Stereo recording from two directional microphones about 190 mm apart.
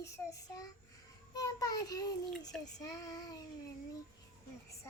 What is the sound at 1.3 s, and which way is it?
Speech, 20° left (ahead or behind).